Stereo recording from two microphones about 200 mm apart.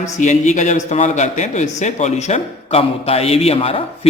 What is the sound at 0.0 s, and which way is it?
A man's voice, 35° left (ahead or behind).